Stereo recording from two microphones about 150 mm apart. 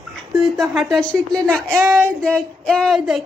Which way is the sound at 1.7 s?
5° right (ahead or behind).